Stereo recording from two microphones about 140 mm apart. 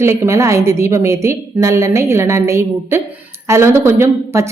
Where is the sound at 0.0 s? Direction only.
20° right (ahead or behind).